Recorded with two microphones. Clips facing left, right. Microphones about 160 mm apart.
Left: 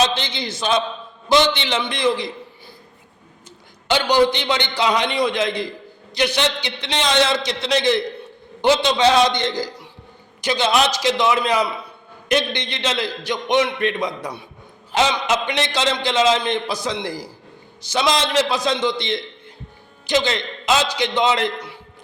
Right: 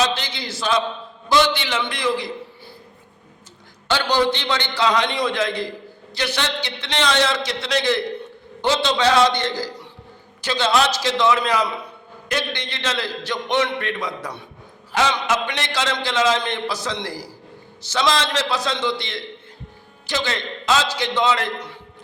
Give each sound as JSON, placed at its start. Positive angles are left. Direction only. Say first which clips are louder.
{"t": 0.0, "sound": "a man's voice", "louder": "left 2 dB", "side_deg": 20}
{"t": 3.8, "sound": "a man's voice", "louder": "left 3 dB", "side_deg": 15}